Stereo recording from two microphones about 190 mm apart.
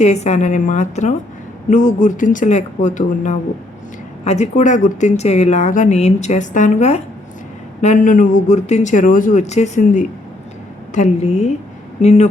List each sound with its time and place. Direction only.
0.0 s speech: 35° left (ahead or behind)